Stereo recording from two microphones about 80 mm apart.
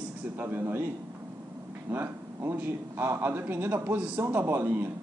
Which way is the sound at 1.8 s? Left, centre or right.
Right.